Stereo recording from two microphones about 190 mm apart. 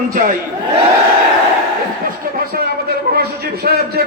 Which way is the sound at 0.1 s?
45° right (ahead or behind).